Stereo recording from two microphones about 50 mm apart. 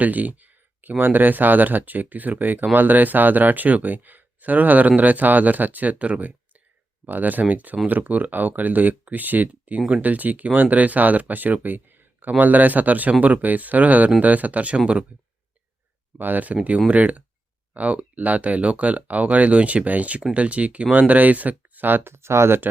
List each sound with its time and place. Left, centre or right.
0.0 s speech: right
16.1 s speech: right
22.1 s speech: right